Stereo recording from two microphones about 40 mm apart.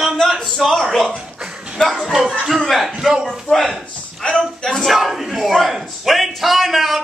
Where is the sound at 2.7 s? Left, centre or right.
Centre.